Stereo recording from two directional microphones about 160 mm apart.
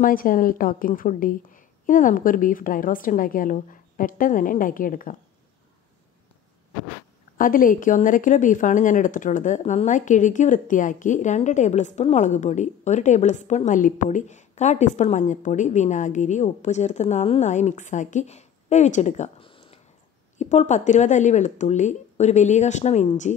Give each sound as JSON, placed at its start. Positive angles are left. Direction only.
{"t": 0.0, "sound": "a woman's voice", "side_deg": 60}
{"t": 7.3, "sound": "speech", "side_deg": 55}
{"t": 19.4, "sound": "a sound", "side_deg": 35}
{"t": 20.3, "sound": "speech", "side_deg": 45}